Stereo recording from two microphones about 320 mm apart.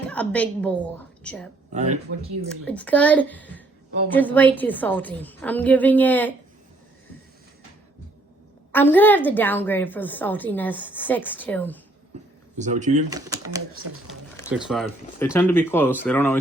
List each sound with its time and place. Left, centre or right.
0.1 s a woman's voice: centre
1.7 s speech: right
2.6 s a woman's voice: centre
8.7 s a woman's voice: centre
12.5 s speech: right
13.1 s speech: centre
14.5 s speech: centre